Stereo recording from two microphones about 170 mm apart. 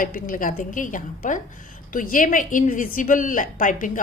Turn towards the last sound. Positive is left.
turn(degrees=50)  # may be behind; listen again after turning